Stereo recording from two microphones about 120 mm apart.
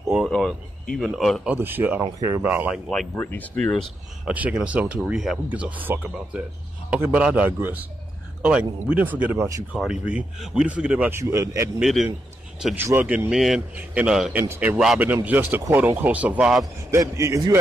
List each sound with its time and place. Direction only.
0.1 s speech: 5° right (ahead or behind)
1.5 s speech: 15° right (ahead or behind)
2.9 s speech: 5° left (ahead or behind)
4.2 s speech: 10° right (ahead or behind)
5.5 s speech: 15° right (ahead or behind)
11.8 s a man's voice: centre (ahead or behind)
12.7 s speech: 15° right (ahead or behind)
16.9 s a man's voice: 25° right (ahead or behind)